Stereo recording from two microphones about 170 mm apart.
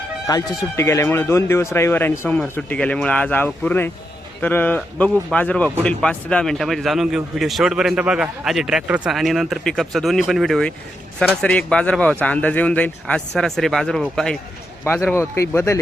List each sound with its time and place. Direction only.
0.3 s speech: 20° left (ahead or behind); by 14.3 s centre (ahead or behind)
15.1 s speech: 15° left (ahead or behind)